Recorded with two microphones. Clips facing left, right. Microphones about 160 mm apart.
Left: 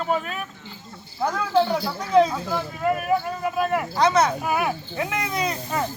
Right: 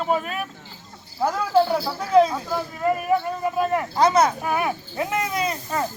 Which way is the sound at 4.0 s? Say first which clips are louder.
Right 2 dB; 10° right (ahead or behind).